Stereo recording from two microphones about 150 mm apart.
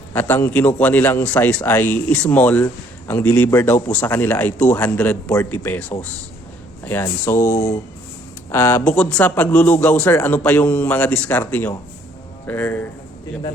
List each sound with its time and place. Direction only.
0.1 s a man's voice: 15° left (ahead or behind)